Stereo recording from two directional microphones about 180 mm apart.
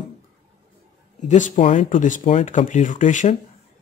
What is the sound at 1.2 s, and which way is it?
Speech, 45° left (ahead or behind).